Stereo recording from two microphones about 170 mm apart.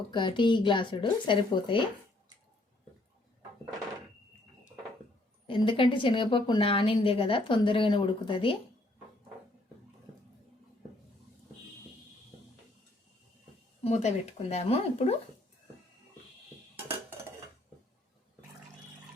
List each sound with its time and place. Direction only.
0.1 s a woman's voice: 30° left (ahead or behind)
5.5 s a woman's voice: 30° left (ahead or behind)
13.8 s speech: 40° left (ahead or behind)